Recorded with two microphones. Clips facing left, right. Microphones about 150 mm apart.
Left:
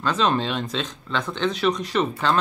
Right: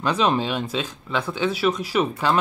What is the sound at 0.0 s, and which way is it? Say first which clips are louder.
Speech: right 1 dB; 10° right (ahead or behind).